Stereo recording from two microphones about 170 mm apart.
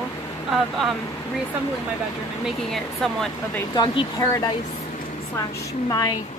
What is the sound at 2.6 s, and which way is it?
Speech, centre (ahead or behind).